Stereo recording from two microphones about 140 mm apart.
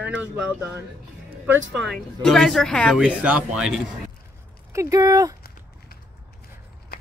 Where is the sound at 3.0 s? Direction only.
10° right (ahead or behind).